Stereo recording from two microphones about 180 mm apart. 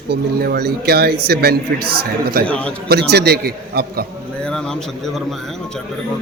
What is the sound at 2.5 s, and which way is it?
Speech, 5° left (ahead or behind).